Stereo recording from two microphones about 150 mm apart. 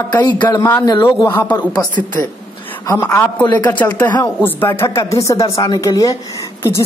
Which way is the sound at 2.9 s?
10° left (ahead or behind).